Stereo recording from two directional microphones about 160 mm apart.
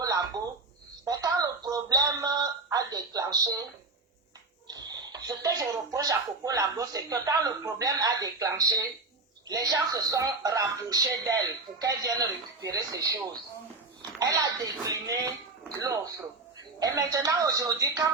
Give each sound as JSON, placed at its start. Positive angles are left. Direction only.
{"t": 0.0, "sound": "a sound", "side_deg": -20}
{"t": 1.0, "sound": "speech", "side_deg": -25}
{"t": 4.7, "sound": "speech", "side_deg": -25}